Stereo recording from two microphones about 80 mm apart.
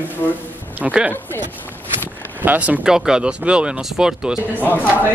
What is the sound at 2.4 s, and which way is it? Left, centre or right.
Speech, right.